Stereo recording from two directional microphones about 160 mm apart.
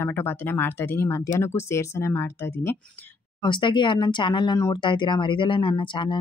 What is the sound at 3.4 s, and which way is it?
Speech, 30° left (ahead or behind).